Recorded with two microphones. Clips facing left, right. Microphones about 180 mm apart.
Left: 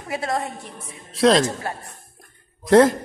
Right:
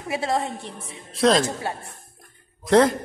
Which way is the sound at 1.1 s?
Centre (ahead or behind).